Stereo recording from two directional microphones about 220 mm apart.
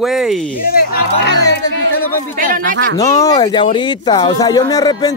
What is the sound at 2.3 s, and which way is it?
Speech, 40° right (ahead or behind).